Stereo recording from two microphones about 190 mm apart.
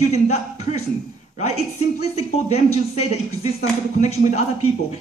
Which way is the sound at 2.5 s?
35° left (ahead or behind).